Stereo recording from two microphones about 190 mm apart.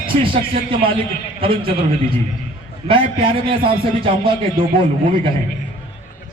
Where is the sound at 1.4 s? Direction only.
30° right (ahead or behind).